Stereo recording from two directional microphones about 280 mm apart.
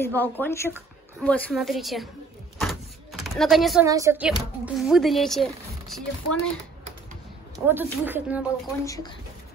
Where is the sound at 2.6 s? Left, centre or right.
Centre.